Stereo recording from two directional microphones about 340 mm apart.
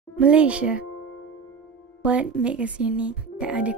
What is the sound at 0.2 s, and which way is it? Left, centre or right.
Speech, centre.